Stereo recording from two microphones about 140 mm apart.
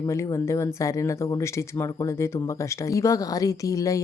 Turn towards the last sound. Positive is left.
turn(degrees=25)  # may be behind; listen again after turning